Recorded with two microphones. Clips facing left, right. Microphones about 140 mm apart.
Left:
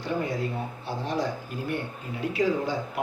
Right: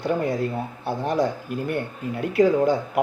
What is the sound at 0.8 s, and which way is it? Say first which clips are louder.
Speech: right 7 dB; 55° right (ahead or behind).